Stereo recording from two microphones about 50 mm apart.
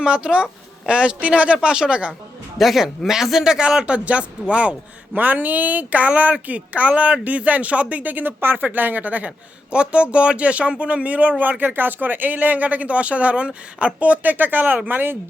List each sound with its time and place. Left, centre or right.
0.0 s speech: centre
2.6 s speech: centre; by 4.7 s right
5.1 s speech: right